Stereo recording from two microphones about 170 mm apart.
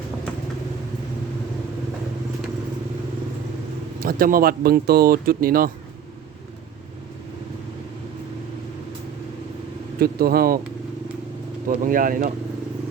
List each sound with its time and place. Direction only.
4.0 s speech: 60° right (ahead or behind)
10.0 s speech: 60° right (ahead or behind)
11.7 s speech: 55° right (ahead or behind)